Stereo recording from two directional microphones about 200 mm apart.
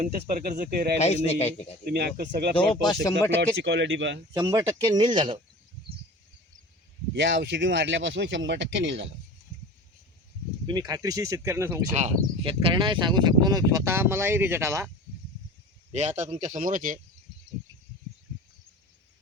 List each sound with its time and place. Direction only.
0.0 s speech: 45° right (ahead or behind)
0.9 s a man's voice: 35° left (ahead or behind)
1.8 s speech: 50° right (ahead or behind)
2.6 s speech: 20° left (ahead or behind)
3.6 s speech: 60° right (ahead or behind)
4.4 s speech: 15° right (ahead or behind)
7.2 s speech: 60° right (ahead or behind)
10.7 s speech: 20° right (ahead or behind)
11.9 s speech: 30° right (ahead or behind); by 14.8 s 15° right (ahead or behind)
15.9 s speech: 35° right (ahead or behind)